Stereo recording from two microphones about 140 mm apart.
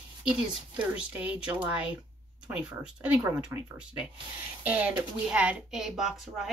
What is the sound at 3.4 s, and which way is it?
A woman's voice, 10° right (ahead or behind).